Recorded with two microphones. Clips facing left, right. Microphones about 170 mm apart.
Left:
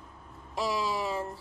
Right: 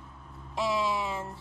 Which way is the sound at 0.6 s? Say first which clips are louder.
Right 1 dB; 35° left (ahead or behind).